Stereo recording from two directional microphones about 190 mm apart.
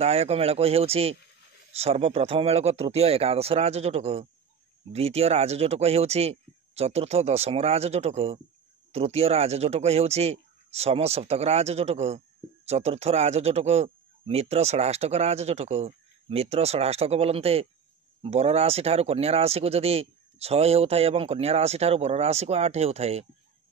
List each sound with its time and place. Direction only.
0.0 s speech: 30° right (ahead or behind)